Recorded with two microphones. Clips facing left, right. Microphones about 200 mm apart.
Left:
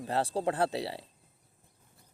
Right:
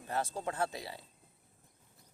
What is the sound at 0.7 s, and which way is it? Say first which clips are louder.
Speech: left 9 dB; 80° left.